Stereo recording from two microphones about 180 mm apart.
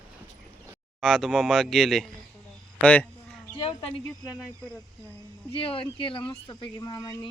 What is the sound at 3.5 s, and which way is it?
Speech, 30° left (ahead or behind).